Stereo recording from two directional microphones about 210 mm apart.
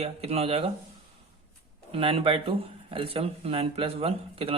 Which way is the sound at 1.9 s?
25° right (ahead or behind).